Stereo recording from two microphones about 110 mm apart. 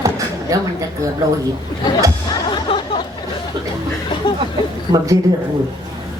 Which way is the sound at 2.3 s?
45° left (ahead or behind).